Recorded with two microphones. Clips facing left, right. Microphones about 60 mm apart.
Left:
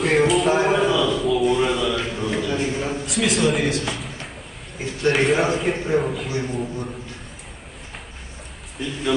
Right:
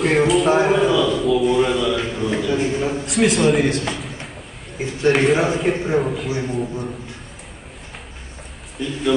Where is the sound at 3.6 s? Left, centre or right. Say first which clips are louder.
Right 3 dB; right.